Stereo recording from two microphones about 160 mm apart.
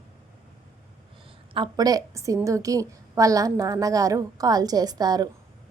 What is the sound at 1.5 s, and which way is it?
A woman's voice, 25° right (ahead or behind).